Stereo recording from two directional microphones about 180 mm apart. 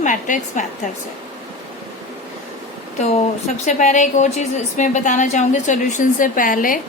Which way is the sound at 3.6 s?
40° left (ahead or behind).